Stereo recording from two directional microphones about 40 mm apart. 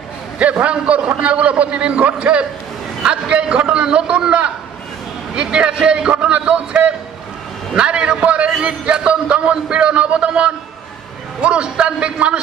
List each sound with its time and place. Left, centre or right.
0.4 s a man's voice: right